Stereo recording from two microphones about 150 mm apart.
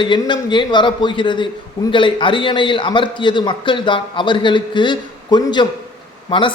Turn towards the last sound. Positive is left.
turn(degrees=35)  # may be behind; listen again after turning